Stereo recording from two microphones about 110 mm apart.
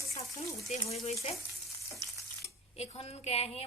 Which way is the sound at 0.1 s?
70° left (ahead or behind).